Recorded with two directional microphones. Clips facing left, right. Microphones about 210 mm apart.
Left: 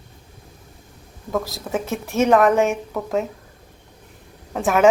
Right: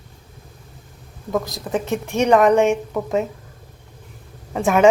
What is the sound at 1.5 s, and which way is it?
Speech, centre (ahead or behind).